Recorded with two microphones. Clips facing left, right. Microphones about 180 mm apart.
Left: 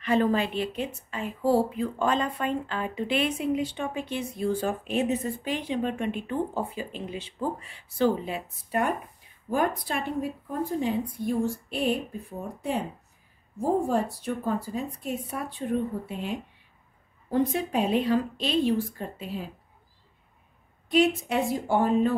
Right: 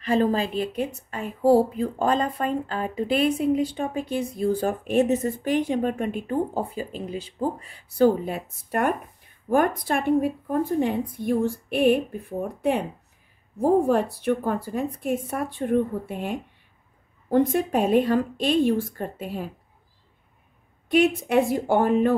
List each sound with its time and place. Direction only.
0.0 s a woman's voice: 35° right (ahead or behind); by 19.5 s 55° right (ahead or behind)
20.9 s a woman's voice: 55° right (ahead or behind)